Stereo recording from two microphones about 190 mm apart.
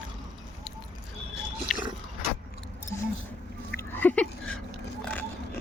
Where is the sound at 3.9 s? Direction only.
10° left (ahead or behind).